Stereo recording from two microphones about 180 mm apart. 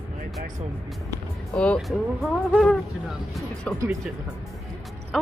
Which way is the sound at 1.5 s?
5° left (ahead or behind).